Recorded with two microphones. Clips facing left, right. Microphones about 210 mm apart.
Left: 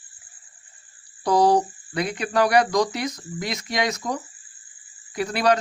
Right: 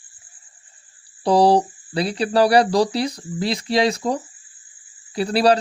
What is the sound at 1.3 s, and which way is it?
Speech, 30° right (ahead or behind).